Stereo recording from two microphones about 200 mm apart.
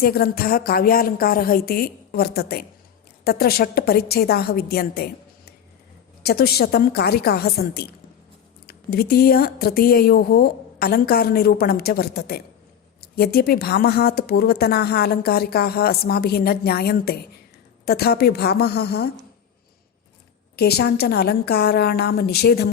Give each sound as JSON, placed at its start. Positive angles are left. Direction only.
{"t": 0.0, "sound": "speech", "side_deg": 50}
{"t": 20.6, "sound": "speech", "side_deg": 55}